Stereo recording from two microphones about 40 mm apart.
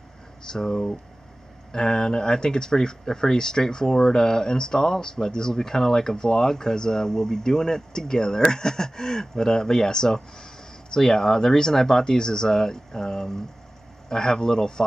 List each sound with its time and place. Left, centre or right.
0.5 s speech: centre